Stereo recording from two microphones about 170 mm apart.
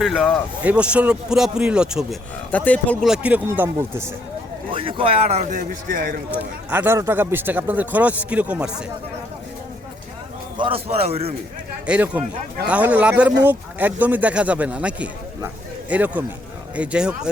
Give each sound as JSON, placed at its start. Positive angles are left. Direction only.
{"t": 0.0, "sound": "speech", "side_deg": 0}
{"t": 2.5, "sound": "speech", "side_deg": 10}
{"t": 3.1, "sound": "a man's voice", "side_deg": -10}
{"t": 4.7, "sound": "speech", "side_deg": -30}
{"t": 6.4, "sound": "a man's voice", "side_deg": -10}
{"t": 10.6, "sound": "speech", "side_deg": -35}
{"t": 11.9, "sound": "a man's voice", "side_deg": -10}